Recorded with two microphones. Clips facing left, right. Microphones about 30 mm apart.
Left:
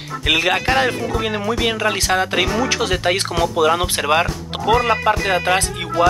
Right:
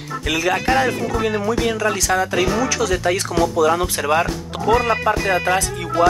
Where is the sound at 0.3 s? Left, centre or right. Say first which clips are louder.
Left 2 dB; left.